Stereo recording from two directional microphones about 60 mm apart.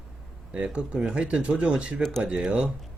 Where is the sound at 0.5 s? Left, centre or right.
Centre.